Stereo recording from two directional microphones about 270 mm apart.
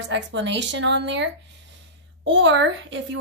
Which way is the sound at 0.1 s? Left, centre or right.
Right.